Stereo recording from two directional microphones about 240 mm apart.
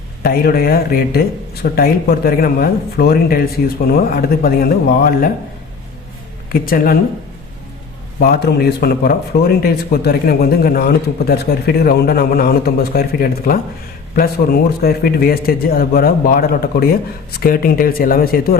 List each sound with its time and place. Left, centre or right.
0.2 s speech: left
6.5 s speech: left
8.2 s speech: left